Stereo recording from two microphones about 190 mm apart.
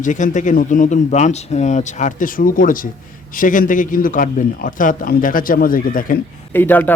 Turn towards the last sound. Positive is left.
turn(degrees=10)  # may be behind; listen again after turning